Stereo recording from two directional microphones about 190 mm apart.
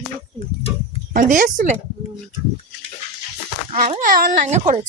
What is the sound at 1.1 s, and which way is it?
Speech, 45° right (ahead or behind).